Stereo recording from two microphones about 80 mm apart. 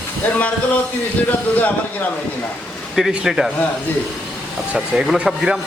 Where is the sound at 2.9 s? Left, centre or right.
Centre.